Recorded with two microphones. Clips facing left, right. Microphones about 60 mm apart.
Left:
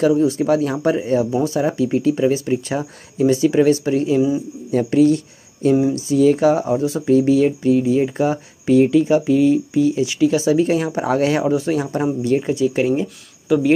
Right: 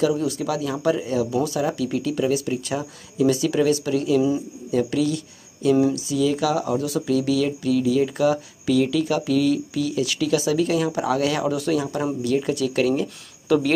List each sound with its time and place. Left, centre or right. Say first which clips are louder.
0.1 s speech: left 8 dB; left